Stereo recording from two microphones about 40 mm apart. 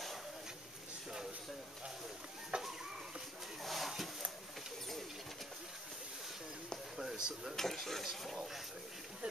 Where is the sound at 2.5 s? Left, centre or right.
Right.